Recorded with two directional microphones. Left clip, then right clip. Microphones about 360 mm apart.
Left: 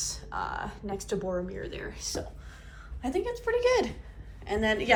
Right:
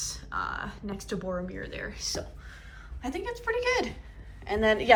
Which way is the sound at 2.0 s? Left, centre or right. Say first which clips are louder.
Right 1 dB; centre.